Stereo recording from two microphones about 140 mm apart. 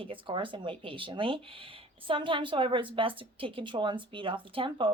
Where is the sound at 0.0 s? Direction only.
40° right (ahead or behind).